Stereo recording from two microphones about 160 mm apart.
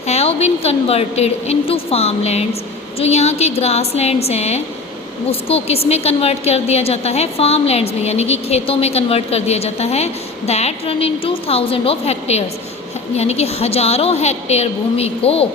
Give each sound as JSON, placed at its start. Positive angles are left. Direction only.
{"t": 0.1, "sound": "a woman's voice", "side_deg": 40}